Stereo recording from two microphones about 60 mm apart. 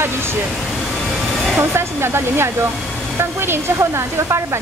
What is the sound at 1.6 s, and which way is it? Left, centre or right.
Speech, right.